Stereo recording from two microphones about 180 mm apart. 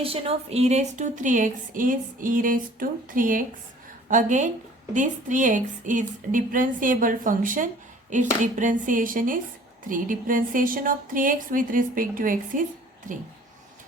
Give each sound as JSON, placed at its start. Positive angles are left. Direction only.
{"t": 0.0, "sound": "speech", "side_deg": -30}